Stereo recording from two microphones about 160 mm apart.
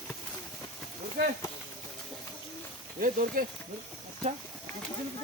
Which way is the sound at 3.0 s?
60° right (ahead or behind).